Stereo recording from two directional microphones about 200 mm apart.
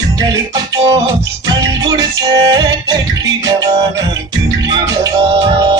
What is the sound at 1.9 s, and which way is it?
Music, 20° right (ahead or behind).